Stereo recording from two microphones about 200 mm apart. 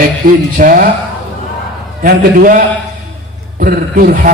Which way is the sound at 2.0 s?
45° right (ahead or behind).